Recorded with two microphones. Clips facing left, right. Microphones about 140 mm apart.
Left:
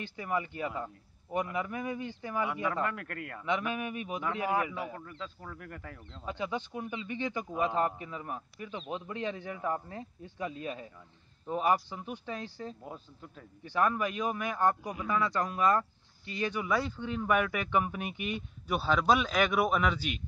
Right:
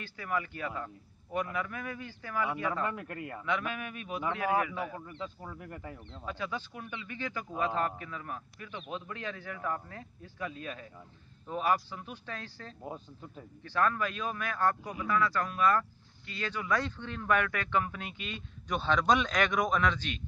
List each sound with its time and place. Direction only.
0.0 s a man's voice: 20° left (ahead or behind)
2.7 s speech: 15° right (ahead or behind)
3.4 s a man's voice: 20° left (ahead or behind)
4.9 s speech: 15° right (ahead or behind)
6.2 s a man's voice: 20° left (ahead or behind)